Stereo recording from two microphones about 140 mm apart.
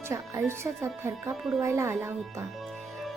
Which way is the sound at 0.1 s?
20° right (ahead or behind).